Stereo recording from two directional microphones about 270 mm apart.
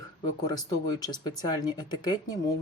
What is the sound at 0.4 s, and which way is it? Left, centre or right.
Speech, centre.